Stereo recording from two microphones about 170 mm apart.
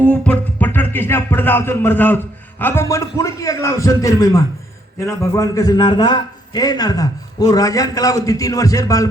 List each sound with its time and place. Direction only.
0.0 s music: 10° left (ahead or behind)
5.3 s a man's voice: 20° left (ahead or behind)